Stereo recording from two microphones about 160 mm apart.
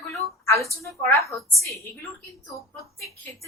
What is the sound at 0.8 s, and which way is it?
Speech, 15° left (ahead or behind).